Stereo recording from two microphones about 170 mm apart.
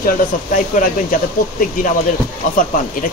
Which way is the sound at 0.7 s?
50° left (ahead or behind).